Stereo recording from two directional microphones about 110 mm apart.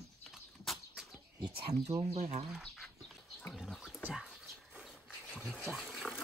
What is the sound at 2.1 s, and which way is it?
Speech, 75° right (ahead or behind).